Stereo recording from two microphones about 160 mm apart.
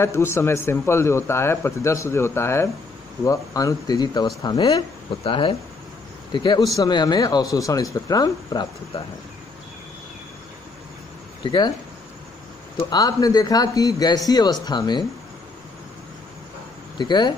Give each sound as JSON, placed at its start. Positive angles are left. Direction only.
{"t": 0.0, "sound": "speech", "side_deg": 15}
{"t": 11.4, "sound": "speech", "side_deg": 30}
{"t": 12.9, "sound": "speech", "side_deg": 25}
{"t": 17.0, "sound": "speech", "side_deg": 25}